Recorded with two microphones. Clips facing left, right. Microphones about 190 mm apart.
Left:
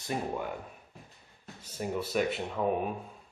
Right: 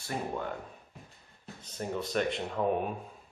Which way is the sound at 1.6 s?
10° left (ahead or behind).